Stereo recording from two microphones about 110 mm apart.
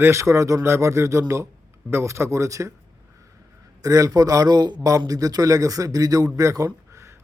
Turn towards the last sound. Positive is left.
turn(degrees=-25)  # may be behind; listen again after turning